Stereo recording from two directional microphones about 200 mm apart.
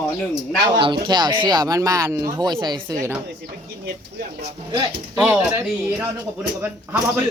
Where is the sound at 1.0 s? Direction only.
20° right (ahead or behind).